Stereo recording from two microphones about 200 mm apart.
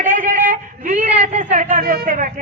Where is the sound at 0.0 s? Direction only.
40° right (ahead or behind).